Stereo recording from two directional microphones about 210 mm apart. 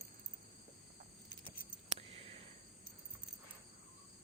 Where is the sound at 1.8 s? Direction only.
30° right (ahead or behind).